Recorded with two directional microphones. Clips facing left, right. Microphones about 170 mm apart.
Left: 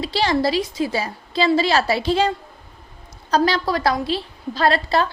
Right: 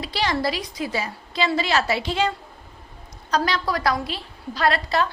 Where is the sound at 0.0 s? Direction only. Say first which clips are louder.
Left 4 dB; 30° left (ahead or behind).